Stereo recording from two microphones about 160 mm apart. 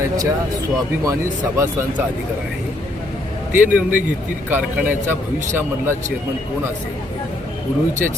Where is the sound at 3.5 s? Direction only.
10° right (ahead or behind).